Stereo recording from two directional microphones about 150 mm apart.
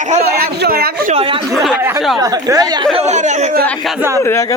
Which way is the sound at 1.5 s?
Centre (ahead or behind).